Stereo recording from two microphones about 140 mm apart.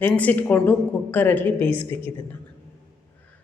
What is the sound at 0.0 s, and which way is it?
Speech, 15° left (ahead or behind).